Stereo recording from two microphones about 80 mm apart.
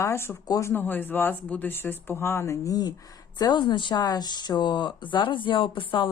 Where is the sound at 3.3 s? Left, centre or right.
Left.